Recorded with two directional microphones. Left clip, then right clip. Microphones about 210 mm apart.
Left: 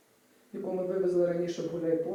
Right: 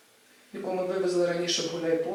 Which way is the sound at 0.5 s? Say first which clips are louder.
Right 3 dB; 10° left (ahead or behind).